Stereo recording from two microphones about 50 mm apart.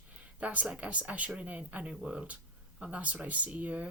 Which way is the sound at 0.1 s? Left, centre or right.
Right.